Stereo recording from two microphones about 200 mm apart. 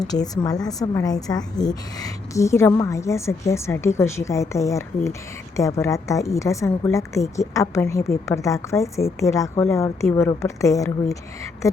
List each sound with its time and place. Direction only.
0.1 s a woman's voice: 20° left (ahead or behind)